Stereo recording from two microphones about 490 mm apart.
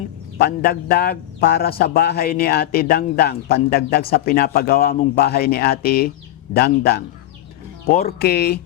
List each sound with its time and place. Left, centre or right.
0.3 s a man's voice: centre